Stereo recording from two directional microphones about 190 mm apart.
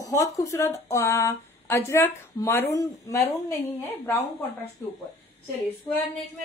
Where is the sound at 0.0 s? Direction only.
15° left (ahead or behind).